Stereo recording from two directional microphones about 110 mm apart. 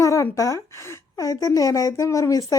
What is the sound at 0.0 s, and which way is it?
A woman's voice, 30° left (ahead or behind).